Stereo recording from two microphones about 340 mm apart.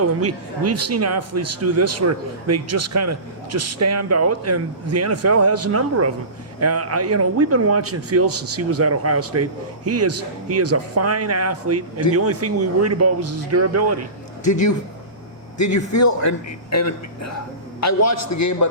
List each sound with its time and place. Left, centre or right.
0.0 s speech: right
14.4 s a man's voice: left